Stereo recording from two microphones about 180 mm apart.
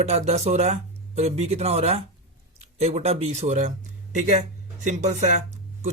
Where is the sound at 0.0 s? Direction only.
35° right (ahead or behind).